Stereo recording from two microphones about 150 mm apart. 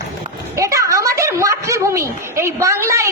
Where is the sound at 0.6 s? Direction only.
20° right (ahead or behind).